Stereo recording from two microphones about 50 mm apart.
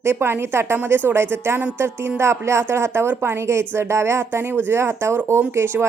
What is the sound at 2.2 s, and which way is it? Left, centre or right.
Music, right.